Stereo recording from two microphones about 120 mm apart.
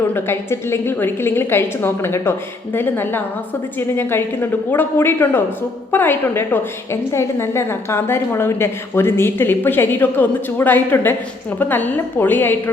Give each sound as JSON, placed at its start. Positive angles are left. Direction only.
{"t": 0.1, "sound": "a woman's voice", "side_deg": 20}